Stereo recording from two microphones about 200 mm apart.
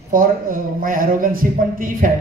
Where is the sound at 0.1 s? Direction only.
45° right (ahead or behind).